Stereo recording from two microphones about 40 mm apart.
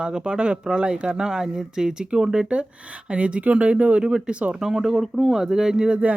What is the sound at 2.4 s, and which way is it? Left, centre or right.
Speech, right.